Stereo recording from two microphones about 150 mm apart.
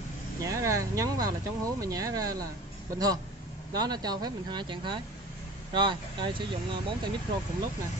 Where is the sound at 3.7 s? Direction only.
25° right (ahead or behind).